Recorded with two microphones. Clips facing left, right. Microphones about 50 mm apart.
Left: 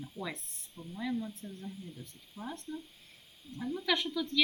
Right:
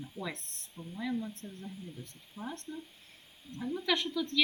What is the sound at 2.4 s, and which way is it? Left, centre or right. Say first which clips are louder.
Speech: right 1 dB; right.